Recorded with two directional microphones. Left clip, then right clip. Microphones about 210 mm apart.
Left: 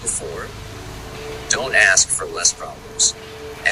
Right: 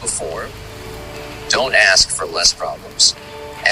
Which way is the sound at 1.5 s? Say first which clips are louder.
Right 3 dB; centre (ahead or behind).